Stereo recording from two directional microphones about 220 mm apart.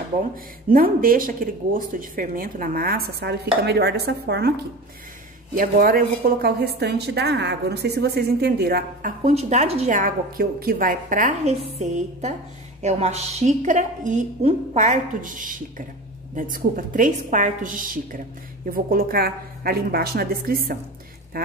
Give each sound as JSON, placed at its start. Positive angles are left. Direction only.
{"t": 0.7, "sound": "a woman's voice", "side_deg": -40}